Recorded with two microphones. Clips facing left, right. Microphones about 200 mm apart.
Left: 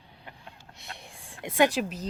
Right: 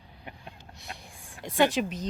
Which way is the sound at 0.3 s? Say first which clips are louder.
Right 3 dB; 15° right (ahead or behind).